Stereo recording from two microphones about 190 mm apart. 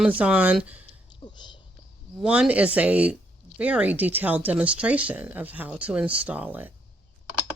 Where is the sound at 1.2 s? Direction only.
25° left (ahead or behind).